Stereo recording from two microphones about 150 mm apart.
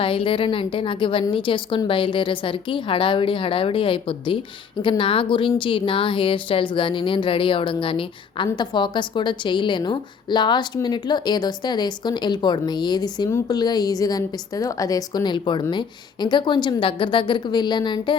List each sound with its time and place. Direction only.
0.0 s a woman's voice: 35° left (ahead or behind)